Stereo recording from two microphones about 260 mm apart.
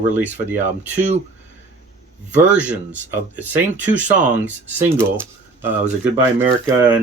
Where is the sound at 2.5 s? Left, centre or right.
Centre.